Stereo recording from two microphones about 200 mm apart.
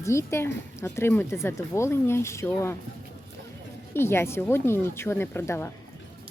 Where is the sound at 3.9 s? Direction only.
10° left (ahead or behind).